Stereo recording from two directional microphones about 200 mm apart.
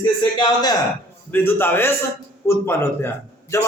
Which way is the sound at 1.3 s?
10° left (ahead or behind).